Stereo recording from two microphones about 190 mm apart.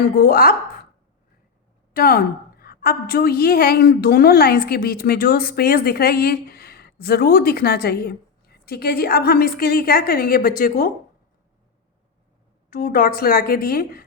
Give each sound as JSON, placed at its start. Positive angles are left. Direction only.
{"t": 0.0, "sound": "a woman's voice", "side_deg": 50}
{"t": 1.9, "sound": "a woman's voice", "side_deg": 50}
{"t": 12.7, "sound": "a woman's voice", "side_deg": 45}